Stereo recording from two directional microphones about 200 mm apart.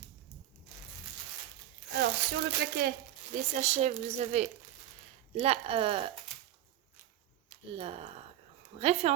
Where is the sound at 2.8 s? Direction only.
50° right (ahead or behind).